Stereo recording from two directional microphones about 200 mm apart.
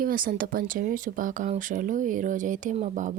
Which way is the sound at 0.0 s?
45° right (ahead or behind).